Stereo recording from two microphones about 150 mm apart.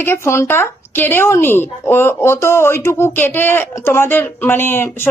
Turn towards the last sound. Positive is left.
turn(degrees=15)  # may be behind; listen again after turning